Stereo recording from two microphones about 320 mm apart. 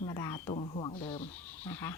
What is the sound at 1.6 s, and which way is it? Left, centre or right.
Speech, centre.